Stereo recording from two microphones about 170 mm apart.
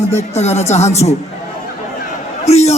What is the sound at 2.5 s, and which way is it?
Speech, 40° left (ahead or behind).